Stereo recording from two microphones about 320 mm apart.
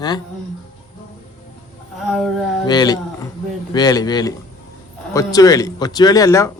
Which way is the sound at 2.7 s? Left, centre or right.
Centre.